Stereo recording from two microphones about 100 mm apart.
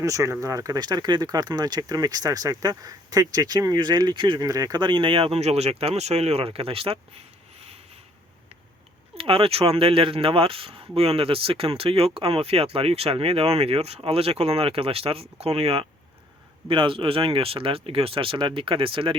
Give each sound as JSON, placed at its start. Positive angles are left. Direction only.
{"t": 0.0, "sound": "speech", "side_deg": -35}
{"t": 4.4, "sound": "speech", "side_deg": -40}
{"t": 9.1, "sound": "speech", "side_deg": -65}
{"t": 16.6, "sound": "speech", "side_deg": -60}